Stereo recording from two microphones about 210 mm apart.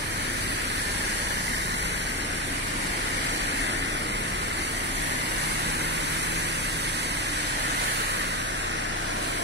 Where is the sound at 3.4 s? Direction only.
55° right (ahead or behind).